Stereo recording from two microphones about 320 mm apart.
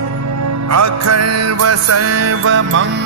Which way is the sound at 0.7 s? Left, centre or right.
Right.